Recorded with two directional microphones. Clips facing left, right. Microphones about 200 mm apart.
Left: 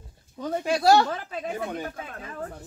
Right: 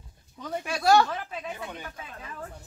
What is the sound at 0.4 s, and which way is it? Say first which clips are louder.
Speech: left 6 dB; 40° left (ahead or behind).